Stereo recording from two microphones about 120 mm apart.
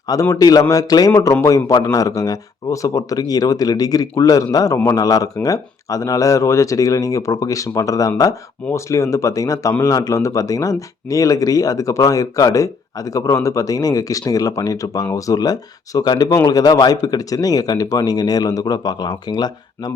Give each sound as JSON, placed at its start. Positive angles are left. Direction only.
{"t": 0.1, "sound": "speech", "side_deg": 30}